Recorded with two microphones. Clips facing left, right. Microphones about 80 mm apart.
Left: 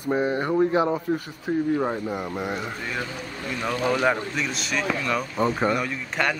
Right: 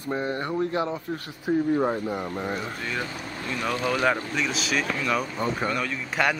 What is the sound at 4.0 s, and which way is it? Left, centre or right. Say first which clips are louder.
Speech: left 1 dB; centre.